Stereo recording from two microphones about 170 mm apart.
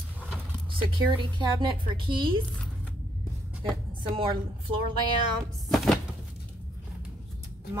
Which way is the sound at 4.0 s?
30° right (ahead or behind).